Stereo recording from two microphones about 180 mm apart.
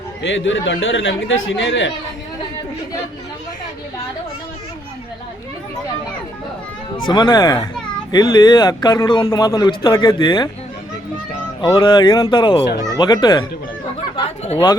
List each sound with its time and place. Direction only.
0.2 s speech: 90° left
7.1 s speech: 25° left (ahead or behind)
11.7 s speech: 25° left (ahead or behind)